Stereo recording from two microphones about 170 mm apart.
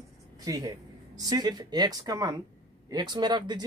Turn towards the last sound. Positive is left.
turn(degrees=-25)  # may be behind; listen again after turning